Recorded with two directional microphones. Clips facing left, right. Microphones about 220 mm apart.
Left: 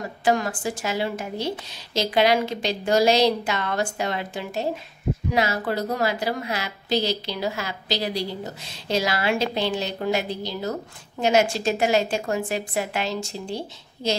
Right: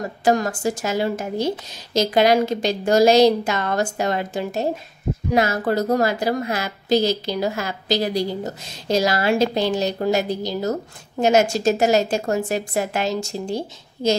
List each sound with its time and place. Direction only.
0.2 s a woman's voice: 40° right (ahead or behind)